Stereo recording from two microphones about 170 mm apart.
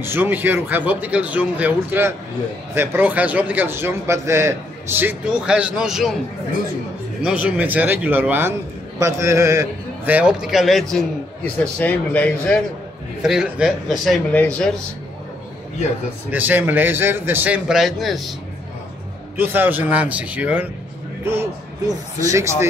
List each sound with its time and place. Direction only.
0.0 s a man's voice: 15° right (ahead or behind)
7.2 s a man's voice: 10° right (ahead or behind); by 12.5 s 10° left (ahead or behind)
13.2 s a man's voice: 5° right (ahead or behind)
16.3 s a man's voice: 10° right (ahead or behind)
19.3 s a man's voice: 10° right (ahead or behind)